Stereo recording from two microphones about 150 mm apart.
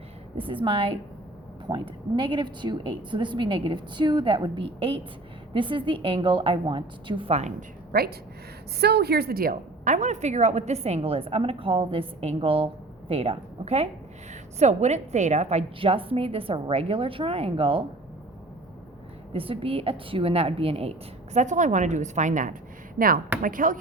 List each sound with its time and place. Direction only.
0.3 s a woman's voice: 35° right (ahead or behind)
7.9 s a woman's voice: 85° right; by 17.8 s 35° right (ahead or behind)
19.3 s a woman's voice: 35° right (ahead or behind)
21.3 s a woman's voice: 55° right (ahead or behind)
23.0 s a woman's voice: 70° right (ahead or behind)